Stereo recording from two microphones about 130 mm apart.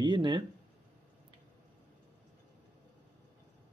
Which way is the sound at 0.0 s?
35° right (ahead or behind).